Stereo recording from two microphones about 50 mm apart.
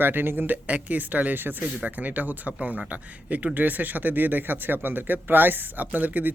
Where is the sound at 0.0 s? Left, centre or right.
Right.